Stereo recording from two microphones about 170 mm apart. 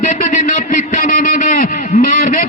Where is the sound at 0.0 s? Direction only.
50° left (ahead or behind).